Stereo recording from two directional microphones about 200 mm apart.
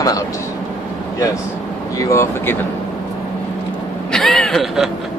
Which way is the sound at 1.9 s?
15° left (ahead or behind).